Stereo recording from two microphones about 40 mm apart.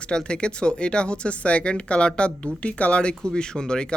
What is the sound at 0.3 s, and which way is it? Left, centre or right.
Speech, left.